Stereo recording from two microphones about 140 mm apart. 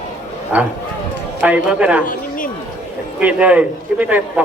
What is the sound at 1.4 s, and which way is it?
Speech, 10° right (ahead or behind).